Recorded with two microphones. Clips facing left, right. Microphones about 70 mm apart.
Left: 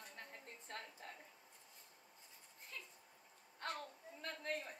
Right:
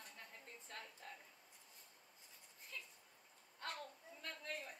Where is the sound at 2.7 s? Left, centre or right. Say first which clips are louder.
Even; left.